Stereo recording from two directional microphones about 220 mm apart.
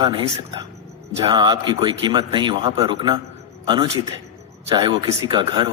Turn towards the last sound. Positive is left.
turn(degrees=-20)  # may be behind; listen again after turning